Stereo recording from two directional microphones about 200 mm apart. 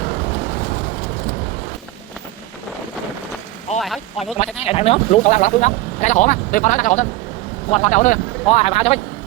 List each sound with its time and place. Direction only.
3.8 s speech: centre (ahead or behind)
4.4 s speech: 30° left (ahead or behind)